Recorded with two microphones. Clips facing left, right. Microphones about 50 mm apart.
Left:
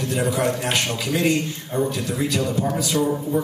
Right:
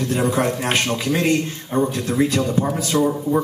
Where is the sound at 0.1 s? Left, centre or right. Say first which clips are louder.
Right 1 dB; right.